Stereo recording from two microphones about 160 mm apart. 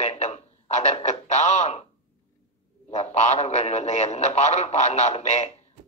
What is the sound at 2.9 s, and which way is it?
A man's voice, 45° left (ahead or behind).